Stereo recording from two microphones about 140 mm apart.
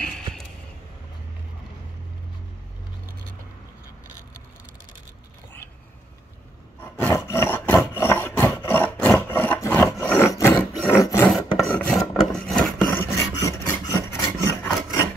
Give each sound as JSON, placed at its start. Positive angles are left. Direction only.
{"t": 0.0, "sound": "a sound", "side_deg": 5}
{"t": 7.0, "sound": "wood", "side_deg": 15}
{"t": 10.9, "sound": "filing", "side_deg": 20}
{"t": 11.2, "sound": "filing", "side_deg": 0}
{"t": 12.1, "sound": "filing", "side_deg": 0}
{"t": 12.9, "sound": "filing", "side_deg": 15}
{"t": 13.8, "sound": "rub", "side_deg": 25}